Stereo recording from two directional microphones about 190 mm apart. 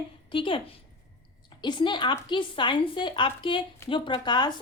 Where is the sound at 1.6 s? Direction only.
25° left (ahead or behind).